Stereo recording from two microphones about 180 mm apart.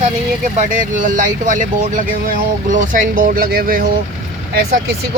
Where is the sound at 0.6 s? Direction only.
45° right (ahead or behind).